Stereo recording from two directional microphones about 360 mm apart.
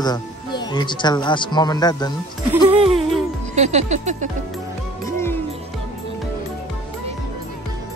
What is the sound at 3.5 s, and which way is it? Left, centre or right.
Music, centre.